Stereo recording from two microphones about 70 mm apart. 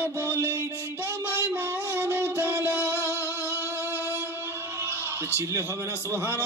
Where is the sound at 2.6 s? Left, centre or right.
Right.